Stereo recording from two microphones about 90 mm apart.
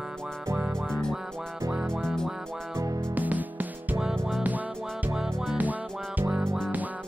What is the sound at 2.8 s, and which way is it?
Music, 30° right (ahead or behind).